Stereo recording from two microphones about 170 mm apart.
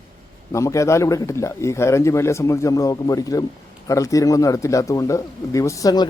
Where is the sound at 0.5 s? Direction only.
20° left (ahead or behind).